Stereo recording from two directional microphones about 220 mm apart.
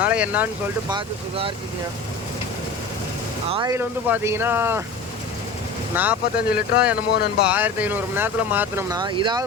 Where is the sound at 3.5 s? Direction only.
15° right (ahead or behind).